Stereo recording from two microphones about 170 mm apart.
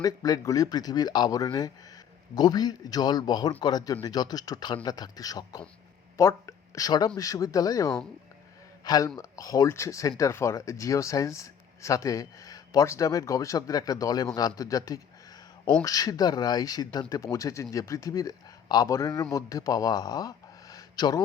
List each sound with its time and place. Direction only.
0.0 s speech: 20° left (ahead or behind)